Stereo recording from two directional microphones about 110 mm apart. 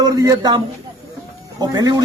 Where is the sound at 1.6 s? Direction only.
35° right (ahead or behind).